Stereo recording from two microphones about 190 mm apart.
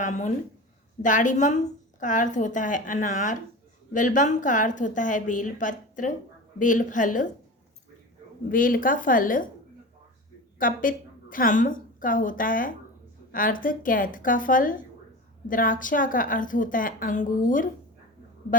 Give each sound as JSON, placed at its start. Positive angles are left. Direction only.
{"t": 0.0, "sound": "a woman's voice", "side_deg": 40}
{"t": 8.4, "sound": "a woman's voice", "side_deg": 45}
{"t": 10.6, "sound": "a woman's voice", "side_deg": 45}